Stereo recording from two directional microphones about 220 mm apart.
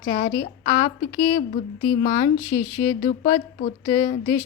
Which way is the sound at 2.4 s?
10° left (ahead or behind).